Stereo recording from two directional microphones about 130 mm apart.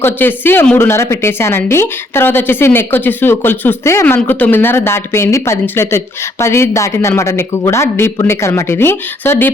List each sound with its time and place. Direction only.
0.0 s a woman's voice: 15° left (ahead or behind)